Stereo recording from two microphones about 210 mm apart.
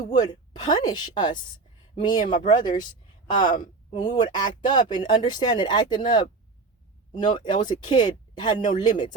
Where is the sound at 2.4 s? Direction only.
20° left (ahead or behind).